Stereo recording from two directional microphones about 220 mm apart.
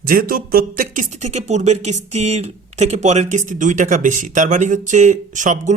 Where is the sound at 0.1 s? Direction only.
40° right (ahead or behind).